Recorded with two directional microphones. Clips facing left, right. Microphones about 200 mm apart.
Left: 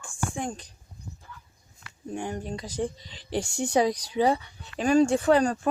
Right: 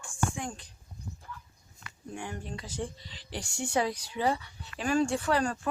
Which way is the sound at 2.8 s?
15° left (ahead or behind).